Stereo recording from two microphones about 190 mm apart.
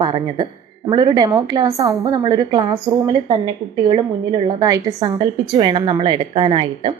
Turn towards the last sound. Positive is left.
turn(degrees=-25)  # may be behind; listen again after turning